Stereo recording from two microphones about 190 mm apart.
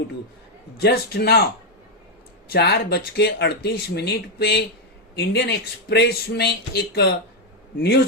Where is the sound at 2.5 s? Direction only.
55° left (ahead or behind).